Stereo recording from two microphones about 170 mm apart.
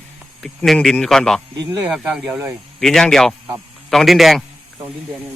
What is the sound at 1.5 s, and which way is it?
Speech, 25° right (ahead or behind).